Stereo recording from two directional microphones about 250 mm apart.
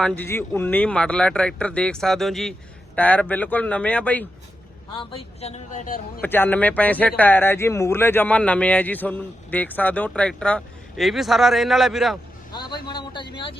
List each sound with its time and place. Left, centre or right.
0.0 s speech: centre
4.9 s a man's voice: left
6.2 s speech: centre
12.5 s a man's voice: centre